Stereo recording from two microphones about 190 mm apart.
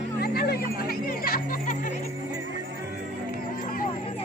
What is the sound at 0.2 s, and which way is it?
Music, 55° left (ahead or behind).